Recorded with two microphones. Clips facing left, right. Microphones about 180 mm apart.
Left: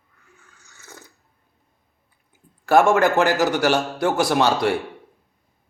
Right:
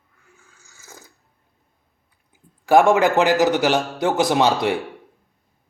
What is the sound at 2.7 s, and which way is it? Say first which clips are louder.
A man's voice: right 1 dB; 15° right (ahead or behind).